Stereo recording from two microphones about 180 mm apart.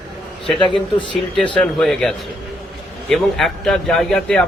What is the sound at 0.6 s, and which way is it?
Speech, 25° left (ahead or behind).